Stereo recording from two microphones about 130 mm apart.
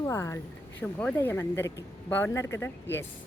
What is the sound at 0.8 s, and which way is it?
Speech, 10° left (ahead or behind).